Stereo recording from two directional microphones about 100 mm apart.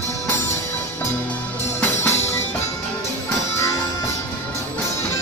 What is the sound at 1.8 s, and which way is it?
Music, 25° left (ahead or behind).